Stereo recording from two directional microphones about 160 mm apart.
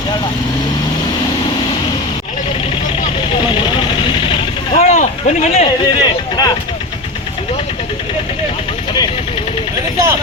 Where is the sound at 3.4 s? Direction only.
30° left (ahead or behind).